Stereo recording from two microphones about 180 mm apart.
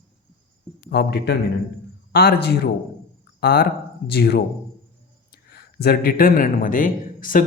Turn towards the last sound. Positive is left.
turn(degrees=50)  # may be behind; listen again after turning